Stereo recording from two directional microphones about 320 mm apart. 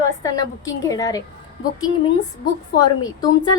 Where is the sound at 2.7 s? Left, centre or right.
Left.